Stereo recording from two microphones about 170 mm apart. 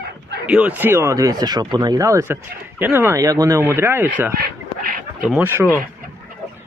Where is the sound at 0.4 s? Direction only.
5° right (ahead or behind).